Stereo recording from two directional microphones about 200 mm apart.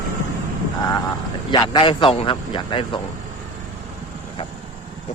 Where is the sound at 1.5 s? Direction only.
20° left (ahead or behind).